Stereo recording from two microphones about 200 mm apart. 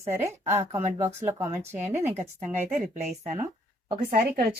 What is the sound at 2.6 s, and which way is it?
A woman's voice, 30° right (ahead or behind).